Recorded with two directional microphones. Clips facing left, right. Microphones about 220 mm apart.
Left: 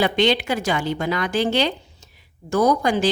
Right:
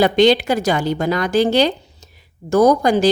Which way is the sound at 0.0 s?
40° right (ahead or behind).